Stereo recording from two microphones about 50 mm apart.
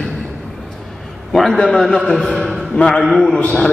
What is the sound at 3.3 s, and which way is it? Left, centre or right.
Speech, left.